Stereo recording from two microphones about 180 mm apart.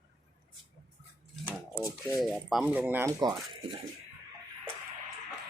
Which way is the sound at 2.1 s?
Centre (ahead or behind).